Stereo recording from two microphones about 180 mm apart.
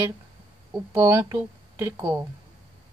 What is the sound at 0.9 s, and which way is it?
Speech, 15° right (ahead or behind).